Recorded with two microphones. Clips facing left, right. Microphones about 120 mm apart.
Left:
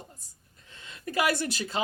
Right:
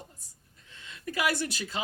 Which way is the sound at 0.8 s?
35° left (ahead or behind).